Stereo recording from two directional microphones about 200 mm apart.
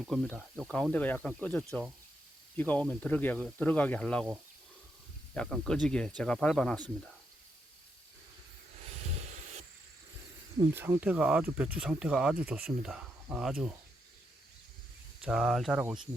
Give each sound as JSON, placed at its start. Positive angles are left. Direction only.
{"t": 0.0, "sound": "speech", "side_deg": 0}
{"t": 5.3, "sound": "speech", "side_deg": 5}
{"t": 9.2, "sound": "a sound", "side_deg": -35}
{"t": 10.6, "sound": "speech", "side_deg": -15}
{"t": 15.2, "sound": "speech", "side_deg": -5}